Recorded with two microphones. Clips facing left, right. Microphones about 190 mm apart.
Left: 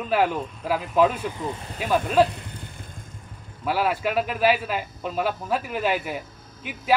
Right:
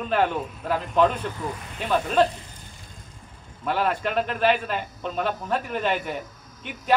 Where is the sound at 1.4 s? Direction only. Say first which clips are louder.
Left 1 dB; 30° left (ahead or behind).